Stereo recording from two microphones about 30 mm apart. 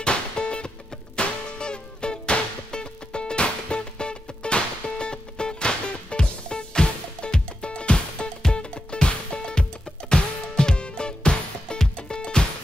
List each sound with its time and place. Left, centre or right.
0.0 s music: left